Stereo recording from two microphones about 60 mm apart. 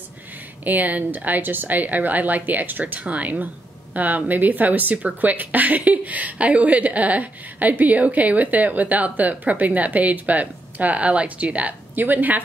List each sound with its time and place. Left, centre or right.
0.7 s a woman's voice: right